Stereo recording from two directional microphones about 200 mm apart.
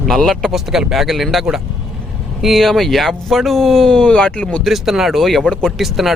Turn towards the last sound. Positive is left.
turn(degrees=0)  # may be behind; listen again after turning